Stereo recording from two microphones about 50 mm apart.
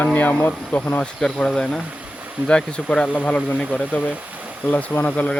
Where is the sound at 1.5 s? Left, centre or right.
Centre.